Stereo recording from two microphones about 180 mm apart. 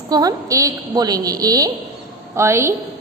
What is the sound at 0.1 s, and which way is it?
A woman's voice, 20° right (ahead or behind).